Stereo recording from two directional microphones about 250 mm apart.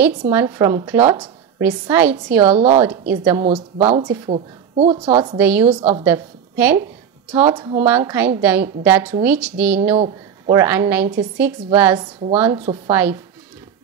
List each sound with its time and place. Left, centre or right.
0.3 s a woman's voice: centre
1.0 s a woman's voice: centre
1.6 s a woman's voice: centre
2.5 s a woman's voice: right
3.1 s a woman's voice: centre
3.4 s a woman's voice: right
5.4 s a woman's voice: centre
5.8 s a woman's voice: right
6.0 s a woman's voice: centre
7.4 s a woman's voice: centre
9.9 s speech: right
10.6 s a woman's voice: centre